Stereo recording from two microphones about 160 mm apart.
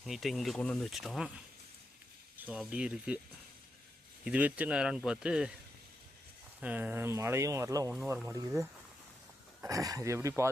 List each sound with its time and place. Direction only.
0.0 s speech: centre (ahead or behind)
2.4 s speech: 5° right (ahead or behind)
4.2 s speech: 10° right (ahead or behind)
6.6 s speech: 10° right (ahead or behind)